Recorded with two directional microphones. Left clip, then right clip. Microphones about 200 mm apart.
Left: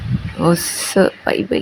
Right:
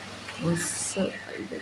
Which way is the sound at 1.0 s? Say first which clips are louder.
Left 17 dB; 45° left (ahead or behind).